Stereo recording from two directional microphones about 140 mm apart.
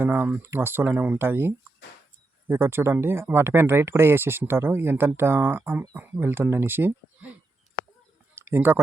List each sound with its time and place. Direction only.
0.0 s speech: 15° right (ahead or behind)
8.4 s speech: 15° right (ahead or behind)